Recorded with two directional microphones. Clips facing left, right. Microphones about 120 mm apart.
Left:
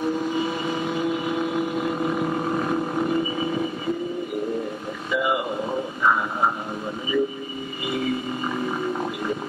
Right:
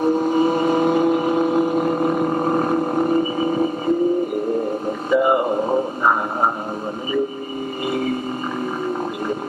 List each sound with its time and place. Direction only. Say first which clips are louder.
0.0 s vehicle: right 7 dB; 45° right (ahead or behind)
5.1 s a sound: right 7 dB; 40° right (ahead or behind)
7.8 s didgeridoo: right 3 dB; 45° right (ahead or behind)